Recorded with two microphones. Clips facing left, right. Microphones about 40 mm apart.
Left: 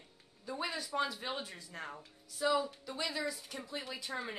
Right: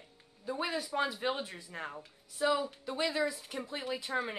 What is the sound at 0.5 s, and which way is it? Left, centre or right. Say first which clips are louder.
Speech: right 3 dB; centre.